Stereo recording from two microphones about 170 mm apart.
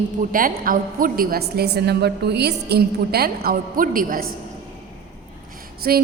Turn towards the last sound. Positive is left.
turn(degrees=-60)  # may be behind; listen again after turning